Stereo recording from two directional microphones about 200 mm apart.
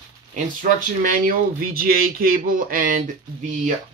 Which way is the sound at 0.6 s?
40° right (ahead or behind).